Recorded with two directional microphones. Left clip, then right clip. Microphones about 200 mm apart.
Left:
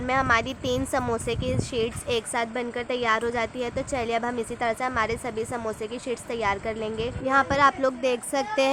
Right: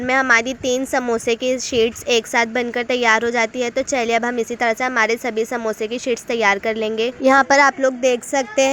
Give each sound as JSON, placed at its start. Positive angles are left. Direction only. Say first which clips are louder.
{"t": 0.0, "sound": "a woman's voice", "louder": "right 7 dB", "side_deg": -20}
{"t": 7.8, "sound": "speech", "louder": "right 7 dB", "side_deg": -15}